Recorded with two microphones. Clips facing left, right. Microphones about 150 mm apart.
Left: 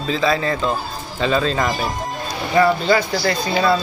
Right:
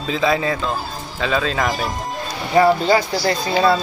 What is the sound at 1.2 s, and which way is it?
Speech, centre (ahead or behind).